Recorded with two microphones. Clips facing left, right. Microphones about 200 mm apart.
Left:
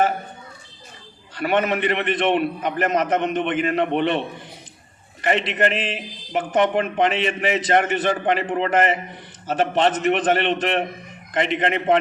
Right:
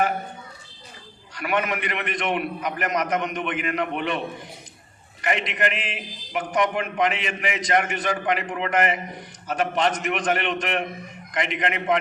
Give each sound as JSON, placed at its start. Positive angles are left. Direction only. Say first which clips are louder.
{"t": 1.4, "sound": "a man's voice", "louder": "left 5 dB", "side_deg": 30}
{"t": 5.2, "sound": "a man's voice", "louder": "left 5 dB", "side_deg": 30}